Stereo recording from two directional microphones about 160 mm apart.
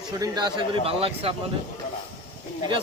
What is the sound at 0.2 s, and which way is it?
Speech, 25° right (ahead or behind).